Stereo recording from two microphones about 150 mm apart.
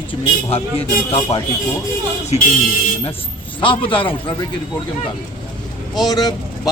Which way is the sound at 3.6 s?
35° left (ahead or behind).